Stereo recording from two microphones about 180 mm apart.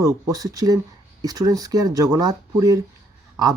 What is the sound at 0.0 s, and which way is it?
Speech, 20° right (ahead or behind).